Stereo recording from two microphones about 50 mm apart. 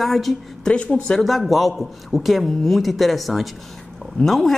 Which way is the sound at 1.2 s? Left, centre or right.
Centre.